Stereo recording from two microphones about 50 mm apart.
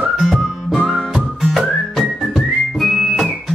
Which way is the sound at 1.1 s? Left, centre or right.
Centre.